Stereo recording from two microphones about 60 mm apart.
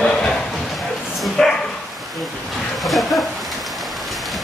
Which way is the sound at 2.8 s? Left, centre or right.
Centre.